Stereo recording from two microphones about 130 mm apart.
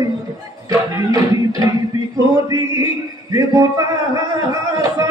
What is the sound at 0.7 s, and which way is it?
Music, 30° right (ahead or behind).